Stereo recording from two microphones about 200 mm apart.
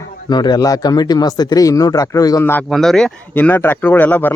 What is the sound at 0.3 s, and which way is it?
Speech, 20° left (ahead or behind).